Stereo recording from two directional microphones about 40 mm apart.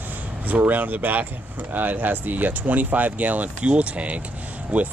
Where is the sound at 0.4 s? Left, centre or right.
Right.